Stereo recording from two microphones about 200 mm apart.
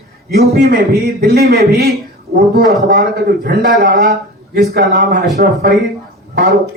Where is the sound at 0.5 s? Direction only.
50° right (ahead or behind).